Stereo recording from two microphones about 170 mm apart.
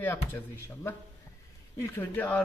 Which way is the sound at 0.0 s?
10° left (ahead or behind).